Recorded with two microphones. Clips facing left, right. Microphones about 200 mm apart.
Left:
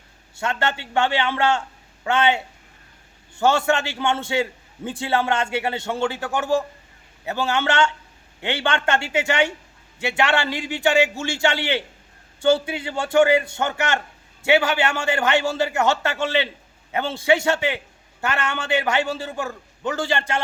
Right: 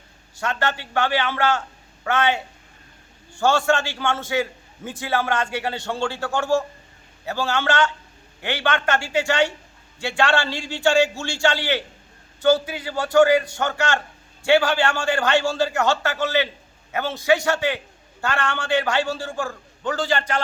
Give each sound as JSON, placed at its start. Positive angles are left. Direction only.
{"t": 0.3, "sound": "a man's voice", "side_deg": 25}